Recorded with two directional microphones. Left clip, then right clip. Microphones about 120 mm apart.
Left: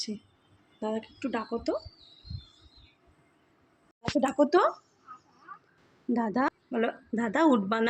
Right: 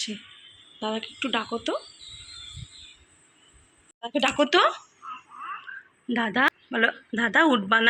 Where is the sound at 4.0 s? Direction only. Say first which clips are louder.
Right 4 dB; 25° left (ahead or behind).